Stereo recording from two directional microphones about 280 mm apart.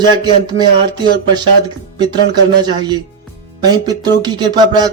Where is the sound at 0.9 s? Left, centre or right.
Centre.